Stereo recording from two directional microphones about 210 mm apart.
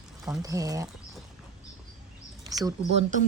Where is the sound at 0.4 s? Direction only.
15° right (ahead or behind).